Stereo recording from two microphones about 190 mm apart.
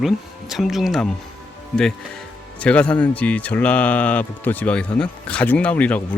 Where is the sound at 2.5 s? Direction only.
5° left (ahead or behind).